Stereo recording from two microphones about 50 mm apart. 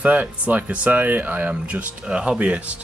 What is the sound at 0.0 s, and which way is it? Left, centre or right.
Speech, right.